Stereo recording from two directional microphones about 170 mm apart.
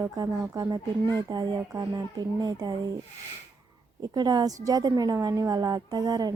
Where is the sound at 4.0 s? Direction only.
25° right (ahead or behind).